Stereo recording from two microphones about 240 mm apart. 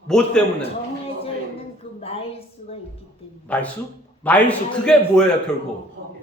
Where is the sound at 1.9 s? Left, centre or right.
Left.